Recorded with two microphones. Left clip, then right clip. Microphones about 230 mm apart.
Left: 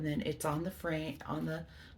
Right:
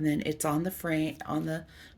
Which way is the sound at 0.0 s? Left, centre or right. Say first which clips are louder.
Right 6 dB; right.